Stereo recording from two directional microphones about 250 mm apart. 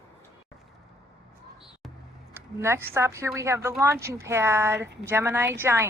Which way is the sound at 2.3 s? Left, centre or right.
Centre.